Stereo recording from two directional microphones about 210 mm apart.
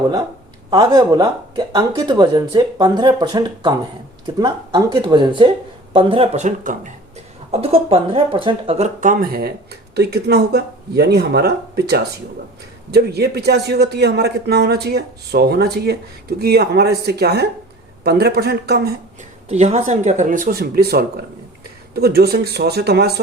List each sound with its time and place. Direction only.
0.7 s a man's voice: 20° right (ahead or behind); by 18.9 s 50° right (ahead or behind)
19.5 s a man's voice: 30° right (ahead or behind); by 23.2 s 50° right (ahead or behind)